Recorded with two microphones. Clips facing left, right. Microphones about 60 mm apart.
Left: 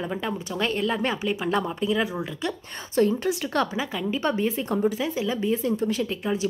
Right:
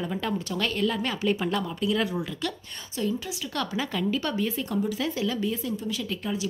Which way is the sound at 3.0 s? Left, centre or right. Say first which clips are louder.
Left 8 dB; left.